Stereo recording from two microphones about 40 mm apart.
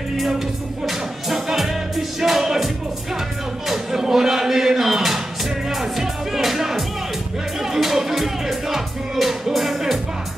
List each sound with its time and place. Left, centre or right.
0.8 s music: centre
3.6 s a sound: centre
5.8 s music: centre